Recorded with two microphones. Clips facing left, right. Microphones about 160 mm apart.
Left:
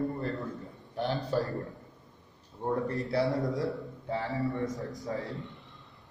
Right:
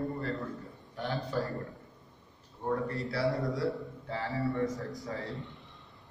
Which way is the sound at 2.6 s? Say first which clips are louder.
Left 2 dB; 20° left (ahead or behind).